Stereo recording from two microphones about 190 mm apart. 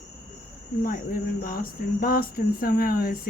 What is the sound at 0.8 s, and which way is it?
Speech, 50° left (ahead or behind).